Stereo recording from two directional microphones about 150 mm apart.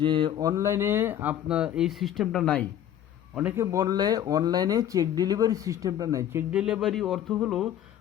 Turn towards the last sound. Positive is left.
turn(degrees=0)  # may be behind; listen again after turning